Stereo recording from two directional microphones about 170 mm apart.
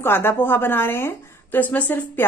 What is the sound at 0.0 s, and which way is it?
A woman's voice, 15° left (ahead or behind).